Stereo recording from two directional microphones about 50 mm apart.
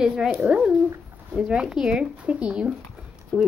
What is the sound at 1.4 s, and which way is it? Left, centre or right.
Speech, centre.